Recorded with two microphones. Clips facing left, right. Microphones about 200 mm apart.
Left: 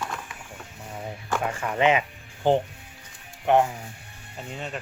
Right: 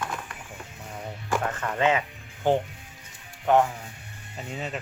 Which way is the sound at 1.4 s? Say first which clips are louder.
Left 3 dB; 10° left (ahead or behind).